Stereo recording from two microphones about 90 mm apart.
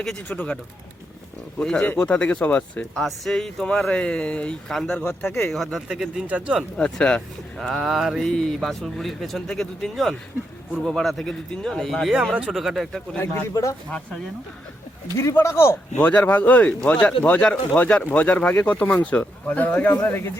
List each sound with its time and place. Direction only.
0.3 s speech: 20° left (ahead or behind)
1.5 s speech: 10° left (ahead or behind)
5.9 s speech: 10° right (ahead or behind)
6.7 s speech: 10° left (ahead or behind)
12.1 s speech: 10° right (ahead or behind)
13.1 s speech: 35° left (ahead or behind)
15.2 s speech: 30° left (ahead or behind)
16.0 s speech: 15° left (ahead or behind)